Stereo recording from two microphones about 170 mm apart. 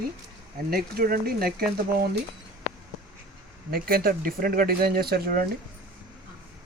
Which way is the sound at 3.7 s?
60° right (ahead or behind).